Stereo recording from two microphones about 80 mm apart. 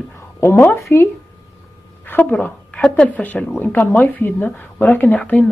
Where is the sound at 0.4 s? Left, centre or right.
Left.